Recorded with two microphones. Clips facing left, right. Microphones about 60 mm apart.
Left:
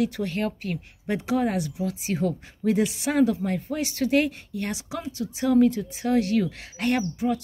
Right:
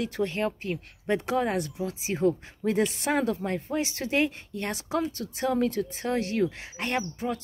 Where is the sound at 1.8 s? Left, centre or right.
Right.